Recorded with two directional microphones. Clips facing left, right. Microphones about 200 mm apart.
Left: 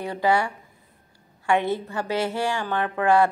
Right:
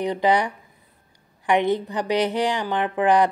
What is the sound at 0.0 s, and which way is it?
A woman's voice, 20° right (ahead or behind).